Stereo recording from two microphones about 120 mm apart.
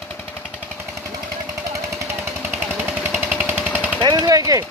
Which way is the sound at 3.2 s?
15° right (ahead or behind).